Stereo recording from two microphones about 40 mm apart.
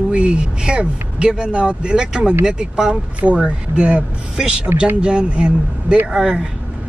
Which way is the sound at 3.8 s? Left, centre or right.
Right.